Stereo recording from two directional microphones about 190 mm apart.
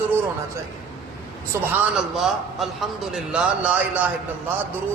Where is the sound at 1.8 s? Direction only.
Centre (ahead or behind).